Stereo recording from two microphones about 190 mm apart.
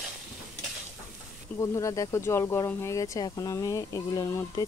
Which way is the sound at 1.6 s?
20° left (ahead or behind).